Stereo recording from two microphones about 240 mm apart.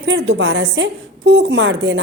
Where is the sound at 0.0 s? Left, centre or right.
Right.